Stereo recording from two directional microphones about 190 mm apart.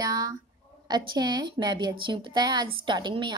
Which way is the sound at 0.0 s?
20° right (ahead or behind).